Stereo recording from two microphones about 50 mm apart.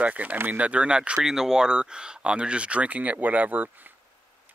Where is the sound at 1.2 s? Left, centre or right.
Centre; by 3.7 s right.